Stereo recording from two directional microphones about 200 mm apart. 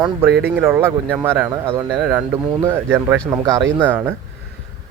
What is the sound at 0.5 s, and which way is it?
Speech, 10° right (ahead or behind).